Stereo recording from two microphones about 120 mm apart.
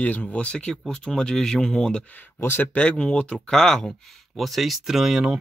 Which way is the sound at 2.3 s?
15° left (ahead or behind).